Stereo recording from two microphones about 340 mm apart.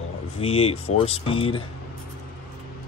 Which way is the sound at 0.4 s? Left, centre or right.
Centre.